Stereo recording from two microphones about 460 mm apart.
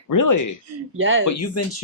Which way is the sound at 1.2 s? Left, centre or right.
Left.